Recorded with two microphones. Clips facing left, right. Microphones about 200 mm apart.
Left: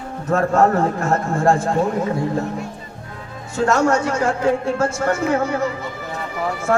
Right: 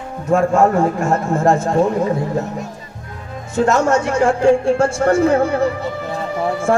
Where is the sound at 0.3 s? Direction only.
10° right (ahead or behind).